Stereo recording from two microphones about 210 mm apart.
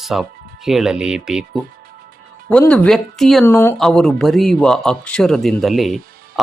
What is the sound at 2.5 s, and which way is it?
Speech, 5° left (ahead or behind).